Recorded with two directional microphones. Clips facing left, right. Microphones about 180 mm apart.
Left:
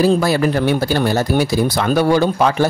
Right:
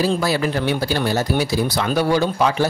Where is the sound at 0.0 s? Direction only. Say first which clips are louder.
Left 5 dB; 50° left (ahead or behind).